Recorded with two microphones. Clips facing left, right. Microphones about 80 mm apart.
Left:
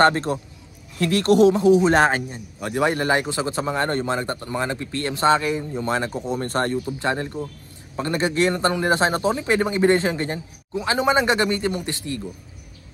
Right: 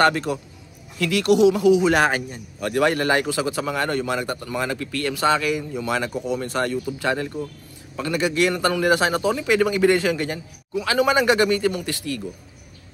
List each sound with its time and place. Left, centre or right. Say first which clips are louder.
0.0 s a man's voice: left 1 dB; left
6.9 s a man's voice: right 1 dB; left